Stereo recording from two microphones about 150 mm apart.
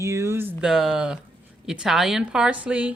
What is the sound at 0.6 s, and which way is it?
Speech, centre (ahead or behind).